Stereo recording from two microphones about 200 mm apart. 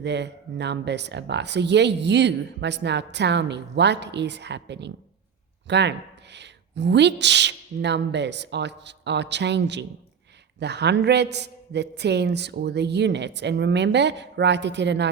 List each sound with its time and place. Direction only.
0.0 s speech: 60° right (ahead or behind)